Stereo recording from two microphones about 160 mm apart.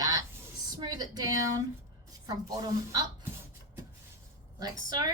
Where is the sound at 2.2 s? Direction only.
25° right (ahead or behind).